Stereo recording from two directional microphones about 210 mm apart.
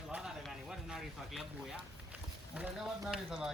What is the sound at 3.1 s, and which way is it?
Speech, 5° right (ahead or behind).